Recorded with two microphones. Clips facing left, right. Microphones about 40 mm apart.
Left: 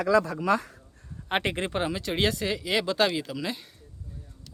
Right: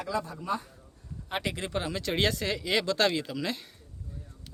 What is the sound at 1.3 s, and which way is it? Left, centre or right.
Speech, left.